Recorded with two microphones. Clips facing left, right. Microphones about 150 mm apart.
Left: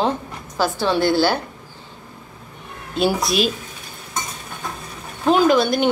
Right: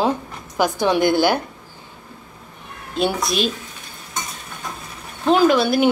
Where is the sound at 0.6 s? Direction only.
15° right (ahead or behind).